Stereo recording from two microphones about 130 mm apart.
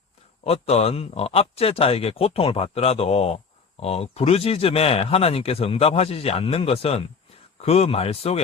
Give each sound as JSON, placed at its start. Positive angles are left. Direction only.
{"t": 0.4, "sound": "speech", "side_deg": 50}